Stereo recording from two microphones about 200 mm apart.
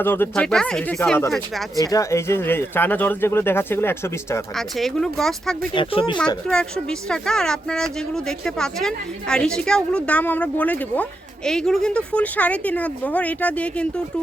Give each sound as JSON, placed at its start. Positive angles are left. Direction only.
{"t": 0.0, "sound": "speech", "side_deg": 10}
{"t": 1.7, "sound": "speech", "side_deg": 15}
{"t": 4.5, "sound": "speech", "side_deg": 0}
{"t": 5.7, "sound": "speech", "side_deg": 25}
{"t": 7.1, "sound": "speech", "side_deg": 5}